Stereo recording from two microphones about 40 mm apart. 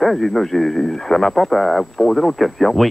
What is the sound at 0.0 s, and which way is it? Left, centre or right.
Speech, centre.